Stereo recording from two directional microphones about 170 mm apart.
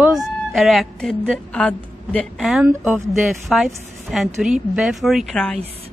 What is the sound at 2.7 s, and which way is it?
Speech, 15° right (ahead or behind).